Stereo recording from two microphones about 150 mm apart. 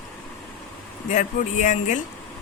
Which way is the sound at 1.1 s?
55° left (ahead or behind).